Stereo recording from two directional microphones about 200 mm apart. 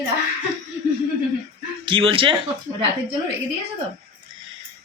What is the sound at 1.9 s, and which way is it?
Speech, 25° right (ahead or behind).